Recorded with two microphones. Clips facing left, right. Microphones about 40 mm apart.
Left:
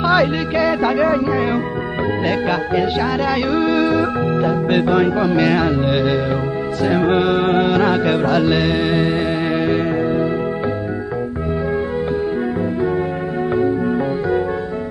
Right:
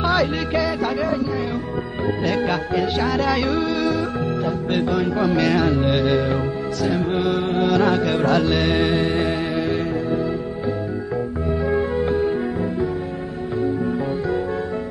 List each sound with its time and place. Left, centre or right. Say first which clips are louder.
0.1 s music: left 4 dB; left
2.2 s music: left 2 dB; left
3.0 s music: left 2 dB; centre
3.5 s music: left 5 dB; left
4.6 s music: left 4 dB; left
5.2 s music: left 3 dB; centre
5.9 s music: left 2 dB; centre
7.6 s music: left 2 dB; left
8.2 s music: left 3 dB; centre